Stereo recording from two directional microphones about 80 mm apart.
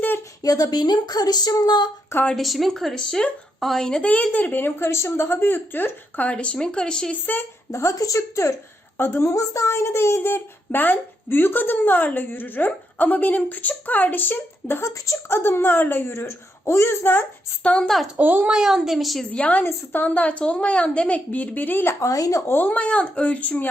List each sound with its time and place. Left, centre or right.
0.4 s speech: left
2.3 s speech: centre
7.7 s a woman's voice: left
14.8 s a woman's voice: left
17.6 s speech: centre
18.2 s a child's voice: right
18.5 s a woman's voice: centre
19.3 s speech: centre
22.0 s a woman's voice: left
22.5 s speech: left